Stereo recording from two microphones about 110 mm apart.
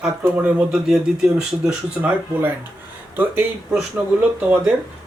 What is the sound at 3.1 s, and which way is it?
Speech, 15° right (ahead or behind).